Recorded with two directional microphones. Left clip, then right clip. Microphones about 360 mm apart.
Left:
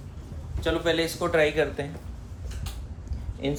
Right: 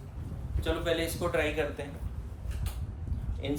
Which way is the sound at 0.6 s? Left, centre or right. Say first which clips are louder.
Left 6 dB; centre.